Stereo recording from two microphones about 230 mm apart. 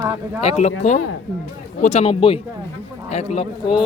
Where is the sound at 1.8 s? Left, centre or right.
Left.